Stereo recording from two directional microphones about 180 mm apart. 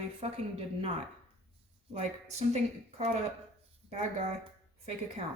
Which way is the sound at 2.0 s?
40° right (ahead or behind).